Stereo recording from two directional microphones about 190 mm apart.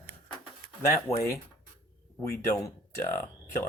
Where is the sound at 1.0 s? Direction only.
15° left (ahead or behind).